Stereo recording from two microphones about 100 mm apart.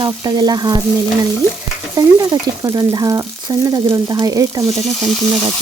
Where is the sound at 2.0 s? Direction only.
40° right (ahead or behind).